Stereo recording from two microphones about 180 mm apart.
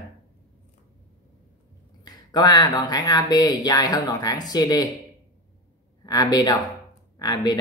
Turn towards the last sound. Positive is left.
turn(degrees=25)  # may be behind; listen again after turning